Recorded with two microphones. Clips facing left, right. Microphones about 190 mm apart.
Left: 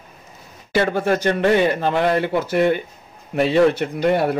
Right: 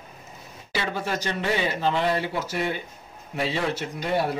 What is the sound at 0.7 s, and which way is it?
A man's voice, 50° left (ahead or behind).